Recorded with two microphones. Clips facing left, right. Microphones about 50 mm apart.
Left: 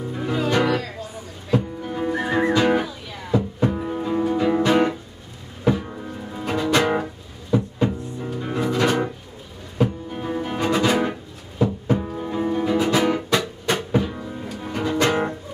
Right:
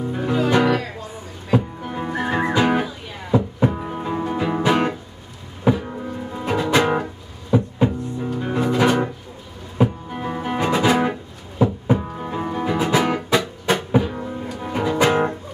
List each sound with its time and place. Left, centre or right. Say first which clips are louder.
0.3 s music: right 3 dB; centre
0.6 s music: right 2 dB; right
10.6 s music: right 2 dB; centre